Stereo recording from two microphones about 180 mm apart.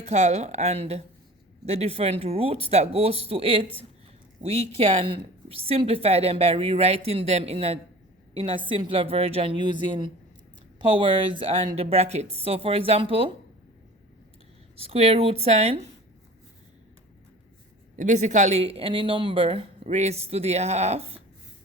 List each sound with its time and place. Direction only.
0.0 s a woman's voice: 40° right (ahead or behind)
14.8 s speech: 35° right (ahead or behind)
17.9 s speech: 40° right (ahead or behind)